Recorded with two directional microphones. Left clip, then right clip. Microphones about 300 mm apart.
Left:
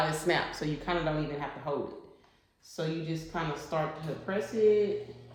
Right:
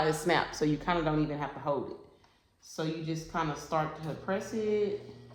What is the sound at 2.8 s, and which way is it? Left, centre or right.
Speech, centre.